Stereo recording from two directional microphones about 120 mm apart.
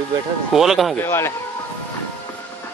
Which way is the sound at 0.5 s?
Centre (ahead or behind).